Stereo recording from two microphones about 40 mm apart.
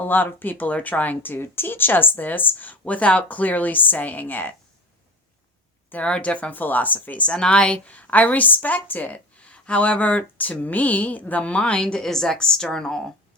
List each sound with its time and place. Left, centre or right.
0.0 s speech: left
6.0 s a woman's voice: left
6.6 s speech: left
7.3 s a woman's voice: left
12.0 s a woman's voice: centre